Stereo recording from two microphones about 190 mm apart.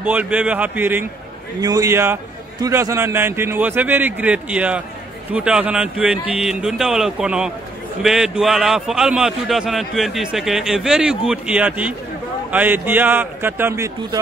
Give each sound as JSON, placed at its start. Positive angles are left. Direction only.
{"t": 0.0, "sound": "a man's voice", "side_deg": -10}